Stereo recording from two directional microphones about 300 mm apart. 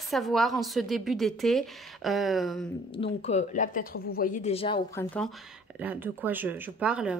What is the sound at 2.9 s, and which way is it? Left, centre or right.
Speech, centre.